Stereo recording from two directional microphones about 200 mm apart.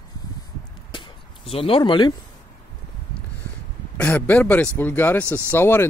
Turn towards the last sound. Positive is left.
turn(degrees=10)  # may be behind; listen again after turning